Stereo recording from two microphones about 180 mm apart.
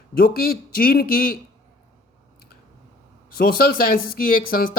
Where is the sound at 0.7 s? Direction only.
55° left (ahead or behind).